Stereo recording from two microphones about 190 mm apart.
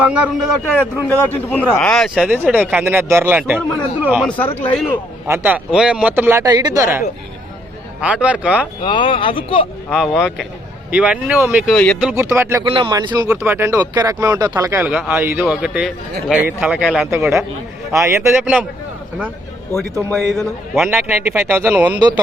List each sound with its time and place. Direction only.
0.0 s a man's voice: 5° right (ahead or behind)
0.7 s speech: 10° left (ahead or behind); by 3.6 s 10° right (ahead or behind)
4.3 s speech: 10° left (ahead or behind)
5.3 s speech: 10° right (ahead or behind)
8.0 s speech: 5° right (ahead or behind)
8.8 s speech: 25° left (ahead or behind)
9.9 s a man's voice: centre (ahead or behind)
11.6 s a man's voice: 5° left (ahead or behind)
12.1 s speech: 15° right (ahead or behind)
12.6 s a man's voice: 25° right (ahead or behind); by 17.1 s centre (ahead or behind)
17.1 s speech: 15° right (ahead or behind)
20.1 s a man's voice: 5° left (ahead or behind)
21.9 s a man's voice: 20° right (ahead or behind)